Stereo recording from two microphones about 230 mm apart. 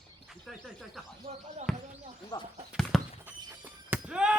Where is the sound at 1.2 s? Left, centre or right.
Right.